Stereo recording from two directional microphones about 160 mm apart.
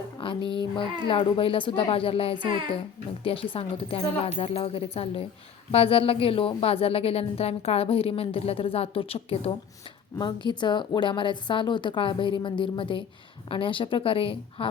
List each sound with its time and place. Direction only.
0.2 s speech: 35° left (ahead or behind)
10.4 s a woman's voice: 30° left (ahead or behind)